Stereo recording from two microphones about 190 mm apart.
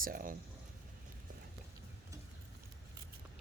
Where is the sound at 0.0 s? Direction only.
50° right (ahead or behind).